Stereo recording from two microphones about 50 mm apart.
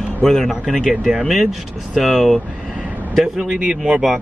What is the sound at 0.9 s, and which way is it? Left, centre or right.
A man's voice, centre.